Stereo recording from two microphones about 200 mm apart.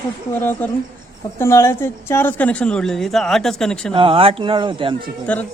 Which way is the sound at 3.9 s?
25° right (ahead or behind).